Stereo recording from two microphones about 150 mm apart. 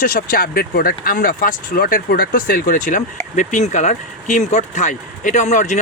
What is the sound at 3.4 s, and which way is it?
Speech, 50° left (ahead or behind).